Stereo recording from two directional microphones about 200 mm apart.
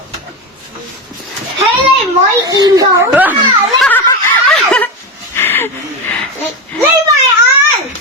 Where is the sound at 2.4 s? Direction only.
20° right (ahead or behind).